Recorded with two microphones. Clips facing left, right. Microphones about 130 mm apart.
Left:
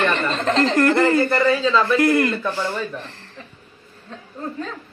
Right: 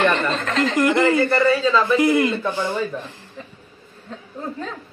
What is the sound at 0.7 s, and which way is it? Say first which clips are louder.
Speech: right 1 dB; 10° right (ahead or behind).